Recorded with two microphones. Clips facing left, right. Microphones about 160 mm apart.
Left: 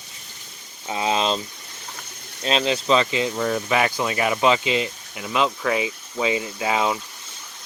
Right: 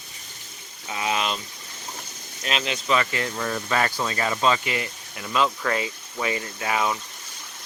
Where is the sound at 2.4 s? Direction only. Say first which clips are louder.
Left 6 dB; 30° left (ahead or behind).